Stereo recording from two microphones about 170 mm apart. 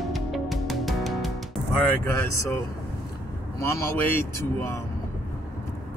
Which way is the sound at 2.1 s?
15° left (ahead or behind).